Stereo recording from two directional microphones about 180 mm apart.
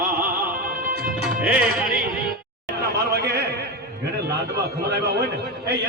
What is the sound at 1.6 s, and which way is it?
Music, 55° right (ahead or behind).